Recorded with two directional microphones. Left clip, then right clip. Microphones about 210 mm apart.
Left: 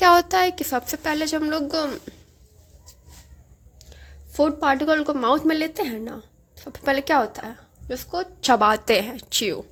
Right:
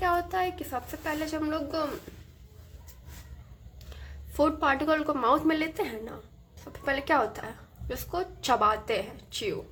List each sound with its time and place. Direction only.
0.0 s a woman's voice: 45° left (ahead or behind)
4.3 s a woman's voice: 25° left (ahead or behind); by 9.6 s 45° left (ahead or behind)